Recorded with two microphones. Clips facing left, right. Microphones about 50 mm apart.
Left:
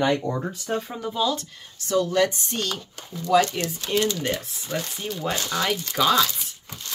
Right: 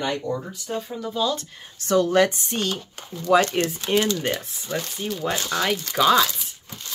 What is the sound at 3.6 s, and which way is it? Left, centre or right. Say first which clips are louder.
Speech: right 5 dB; right.